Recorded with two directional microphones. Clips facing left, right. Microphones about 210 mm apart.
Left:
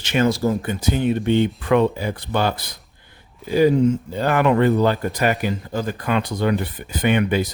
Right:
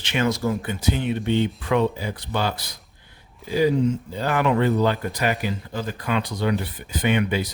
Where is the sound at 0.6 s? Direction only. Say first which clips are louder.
Left 4 dB; 45° left (ahead or behind).